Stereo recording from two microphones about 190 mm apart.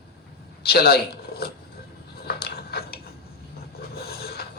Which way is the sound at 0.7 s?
55° left (ahead or behind).